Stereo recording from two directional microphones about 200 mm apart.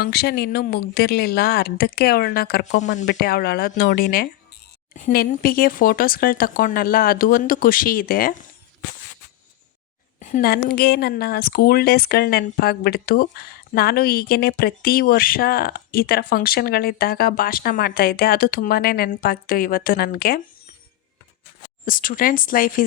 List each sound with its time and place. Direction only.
0.0 s speech: 50° left (ahead or behind)
10.2 s speech: 40° left (ahead or behind)
21.8 s speech: 45° left (ahead or behind)